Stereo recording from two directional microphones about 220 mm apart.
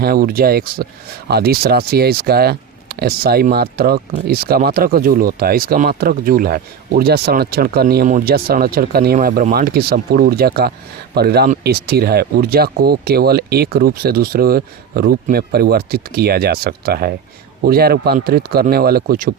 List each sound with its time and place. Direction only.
0.0 s speech: 45° right (ahead or behind)